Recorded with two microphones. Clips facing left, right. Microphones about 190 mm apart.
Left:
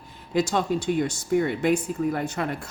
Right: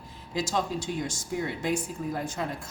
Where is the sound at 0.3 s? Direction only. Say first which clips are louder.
Left 6 dB; 60° left (ahead or behind).